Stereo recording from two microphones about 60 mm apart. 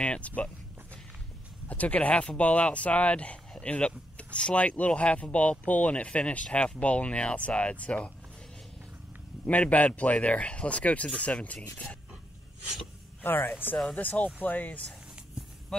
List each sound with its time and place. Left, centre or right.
0.0 s speech: left
1.7 s speech: left
9.5 s speech: left
13.2 s speech: left